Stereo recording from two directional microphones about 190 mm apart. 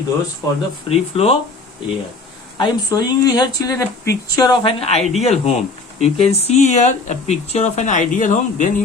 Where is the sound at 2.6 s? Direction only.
20° left (ahead or behind).